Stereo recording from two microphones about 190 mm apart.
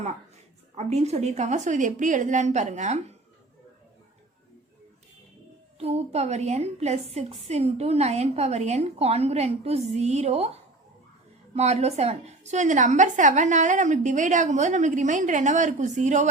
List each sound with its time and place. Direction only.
0.8 s a woman's voice: 35° right (ahead or behind)
5.8 s a woman's voice: 35° right (ahead or behind)